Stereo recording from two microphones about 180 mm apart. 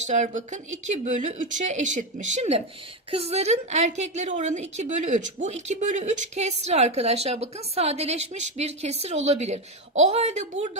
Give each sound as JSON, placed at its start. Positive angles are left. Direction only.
{"t": 0.1, "sound": "a woman's voice", "side_deg": -40}